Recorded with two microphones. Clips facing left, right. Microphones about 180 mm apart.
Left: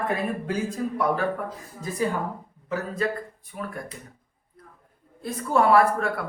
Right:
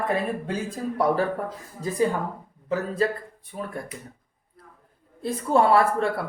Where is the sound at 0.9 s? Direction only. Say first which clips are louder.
Right 3 dB; 35° right (ahead or behind).